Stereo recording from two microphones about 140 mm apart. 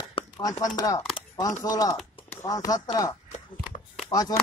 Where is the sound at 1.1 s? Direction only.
30° left (ahead or behind).